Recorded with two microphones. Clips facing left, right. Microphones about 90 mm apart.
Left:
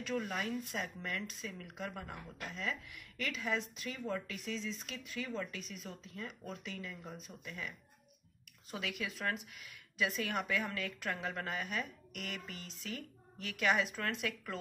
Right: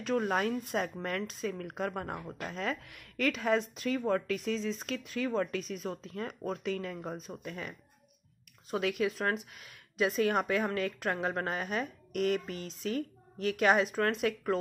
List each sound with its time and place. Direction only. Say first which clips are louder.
0.0 s speech: right 8 dB; 45° right (ahead or behind)
5.6 s speech: right 10 dB; 40° right (ahead or behind)
8.7 s speech: right 10 dB; 40° right (ahead or behind)